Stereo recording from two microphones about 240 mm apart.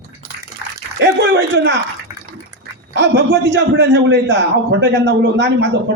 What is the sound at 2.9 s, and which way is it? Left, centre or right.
A man's voice, right.